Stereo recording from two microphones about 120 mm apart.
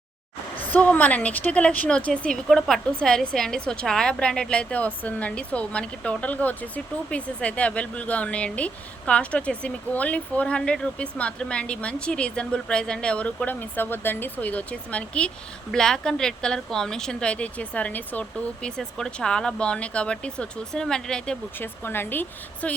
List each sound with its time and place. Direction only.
0.7 s a woman's voice: 10° left (ahead or behind)
21.6 s a woman's voice: 20° left (ahead or behind)